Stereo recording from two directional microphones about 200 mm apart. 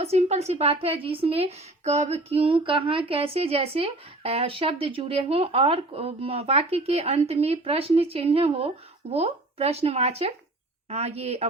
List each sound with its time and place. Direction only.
0.0 s a woman's voice: 35° right (ahead or behind)